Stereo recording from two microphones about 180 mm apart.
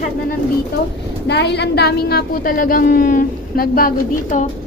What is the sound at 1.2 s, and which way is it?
A woman's voice, 70° left (ahead or behind).